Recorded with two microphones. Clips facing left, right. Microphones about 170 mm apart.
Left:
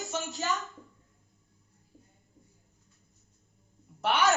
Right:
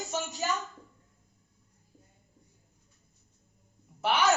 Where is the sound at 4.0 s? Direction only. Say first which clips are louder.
Even; centre (ahead or behind).